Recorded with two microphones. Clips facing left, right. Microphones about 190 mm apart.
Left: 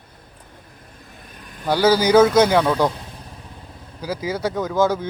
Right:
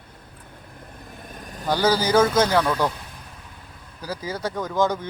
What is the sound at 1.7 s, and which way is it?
A man's voice, 10° left (ahead or behind).